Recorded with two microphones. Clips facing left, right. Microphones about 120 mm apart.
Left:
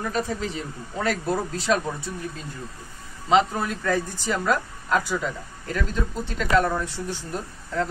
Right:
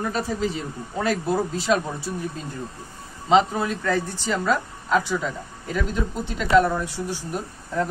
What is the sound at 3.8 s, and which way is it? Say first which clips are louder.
Speech: right 1 dB; 10° left (ahead or behind).